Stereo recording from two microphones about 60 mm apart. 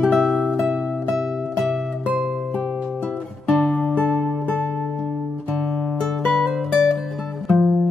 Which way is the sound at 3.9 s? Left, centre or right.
Left.